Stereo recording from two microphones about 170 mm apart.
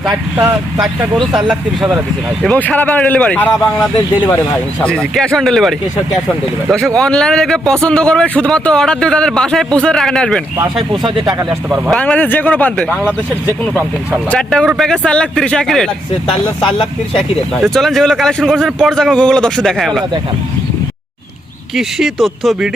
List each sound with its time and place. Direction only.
0.3 s speech: 10° right (ahead or behind)
1.2 s speech: 25° right (ahead or behind)
2.4 s a man's voice: 5° left (ahead or behind)
10.9 s speech: 25° right (ahead or behind)
11.9 s speech: 10° left (ahead or behind)
12.9 s speech: 10° right (ahead or behind)
14.3 s a man's voice: 5° left (ahead or behind)
17.2 s a man's voice: centre (ahead or behind)
21.8 s a man's voice: centre (ahead or behind)